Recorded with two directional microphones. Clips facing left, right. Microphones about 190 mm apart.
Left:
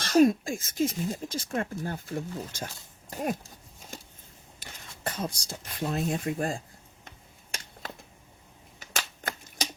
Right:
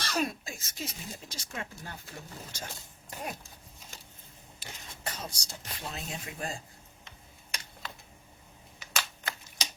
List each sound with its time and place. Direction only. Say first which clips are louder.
0.0 s speech: left 12 dB; 45° left (ahead or behind)
5.0 s speech: left 7 dB; 50° left (ahead or behind)
7.5 s a sound: left 2 dB; 45° left (ahead or behind)
8.8 s typewriter: left 2 dB; 45° left (ahead or behind)